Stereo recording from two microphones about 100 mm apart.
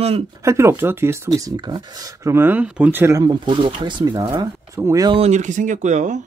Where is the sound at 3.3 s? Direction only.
55° right (ahead or behind).